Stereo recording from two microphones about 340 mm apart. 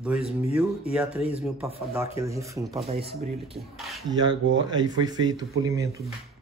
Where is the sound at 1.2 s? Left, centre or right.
Centre.